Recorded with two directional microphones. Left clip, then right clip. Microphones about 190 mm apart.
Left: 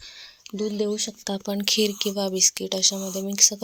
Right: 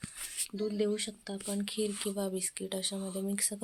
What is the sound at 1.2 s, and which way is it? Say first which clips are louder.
Speech: left 11 dB; 45° left (ahead or behind).